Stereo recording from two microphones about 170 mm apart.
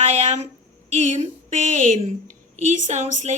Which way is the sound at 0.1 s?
40° right (ahead or behind).